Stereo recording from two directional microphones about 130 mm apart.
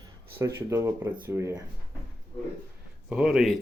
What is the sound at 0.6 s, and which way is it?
Speech, 20° right (ahead or behind).